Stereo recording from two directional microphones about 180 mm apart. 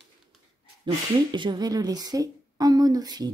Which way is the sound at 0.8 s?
25° right (ahead or behind).